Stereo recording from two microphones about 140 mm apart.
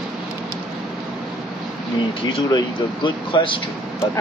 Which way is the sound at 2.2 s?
35° left (ahead or behind).